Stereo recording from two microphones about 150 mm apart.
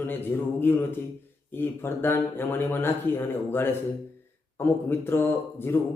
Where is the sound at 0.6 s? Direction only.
15° left (ahead or behind).